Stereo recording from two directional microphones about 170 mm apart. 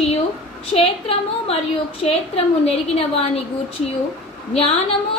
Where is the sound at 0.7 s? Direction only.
35° left (ahead or behind).